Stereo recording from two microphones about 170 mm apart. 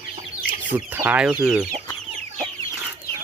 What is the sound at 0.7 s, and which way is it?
Speech, 10° right (ahead or behind).